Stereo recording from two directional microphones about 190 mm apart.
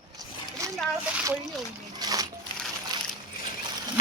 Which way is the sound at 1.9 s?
20° right (ahead or behind).